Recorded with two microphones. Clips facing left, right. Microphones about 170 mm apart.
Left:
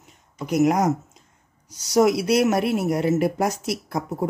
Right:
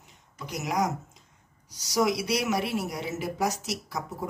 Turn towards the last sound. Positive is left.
turn(degrees=55)  # may be behind; listen again after turning